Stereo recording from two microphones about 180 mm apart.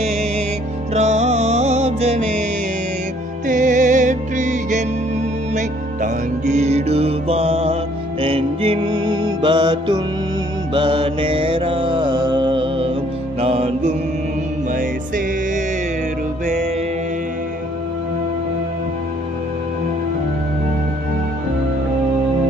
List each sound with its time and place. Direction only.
0.9 s music: 40° right (ahead or behind)
3.4 s music: 45° right (ahead or behind); by 10.0 s 25° right (ahead or behind)
10.8 s mantra: 30° right (ahead or behind)
13.4 s music: 35° right (ahead or behind)
14.7 s music: 50° right (ahead or behind)